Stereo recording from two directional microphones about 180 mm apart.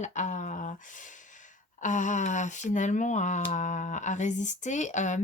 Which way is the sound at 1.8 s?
45° left (ahead or behind).